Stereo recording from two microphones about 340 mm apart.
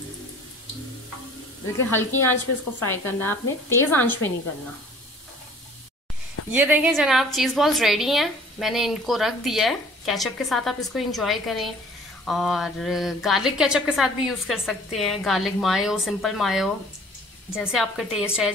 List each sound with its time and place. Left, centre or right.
1.9 s speech: centre
6.5 s a woman's voice: centre